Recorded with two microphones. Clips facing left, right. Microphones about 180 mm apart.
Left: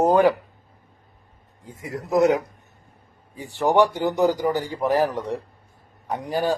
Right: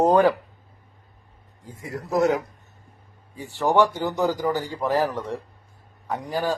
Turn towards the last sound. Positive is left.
turn(degrees=20)  # may be behind; listen again after turning